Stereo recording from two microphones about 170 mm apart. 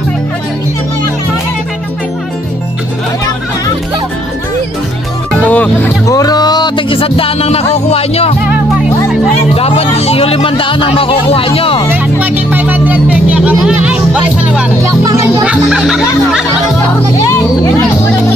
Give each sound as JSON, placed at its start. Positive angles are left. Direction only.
{"t": 5.4, "sound": "music", "side_deg": 10}
{"t": 6.0, "sound": "music", "side_deg": 20}
{"t": 9.6, "sound": "a sound", "side_deg": 35}
{"t": 11.9, "sound": "music", "side_deg": -10}
{"t": 14.8, "sound": "music", "side_deg": -20}
{"t": 15.4, "sound": "music", "side_deg": -5}